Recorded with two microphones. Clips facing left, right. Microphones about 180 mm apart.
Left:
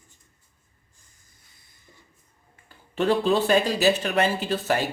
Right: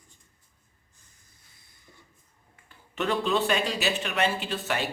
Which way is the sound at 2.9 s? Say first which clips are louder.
Left 5 dB; 35° left (ahead or behind).